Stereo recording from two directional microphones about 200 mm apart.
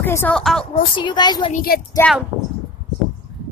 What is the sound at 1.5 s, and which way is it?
Speech, 50° left (ahead or behind).